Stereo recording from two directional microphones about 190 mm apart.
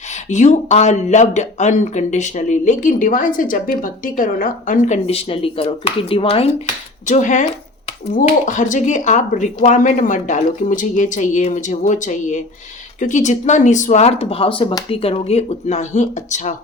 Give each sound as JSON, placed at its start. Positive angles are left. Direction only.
{"t": 0.3, "sound": "speech", "side_deg": 40}